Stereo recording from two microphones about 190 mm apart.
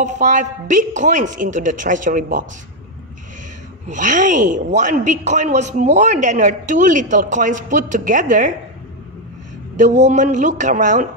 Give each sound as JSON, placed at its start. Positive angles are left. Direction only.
{"t": 0.0, "sound": "a woman's voice", "side_deg": -40}
{"t": 3.8, "sound": "a woman's voice", "side_deg": -40}
{"t": 10.0, "sound": "a woman's voice", "side_deg": -40}